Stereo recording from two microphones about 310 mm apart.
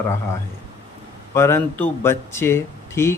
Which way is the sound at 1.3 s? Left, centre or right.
Centre.